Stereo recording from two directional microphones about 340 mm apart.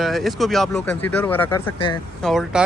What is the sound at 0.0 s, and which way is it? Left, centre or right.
Speech, centre.